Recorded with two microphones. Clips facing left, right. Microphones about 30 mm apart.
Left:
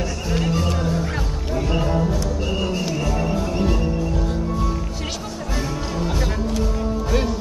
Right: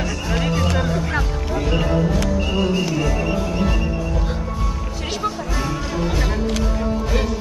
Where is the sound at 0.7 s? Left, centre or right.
Right.